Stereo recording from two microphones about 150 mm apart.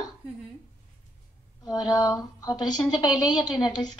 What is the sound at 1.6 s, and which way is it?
A woman's voice, 30° left (ahead or behind).